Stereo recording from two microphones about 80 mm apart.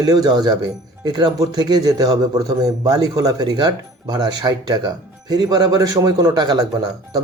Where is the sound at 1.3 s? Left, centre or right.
Right.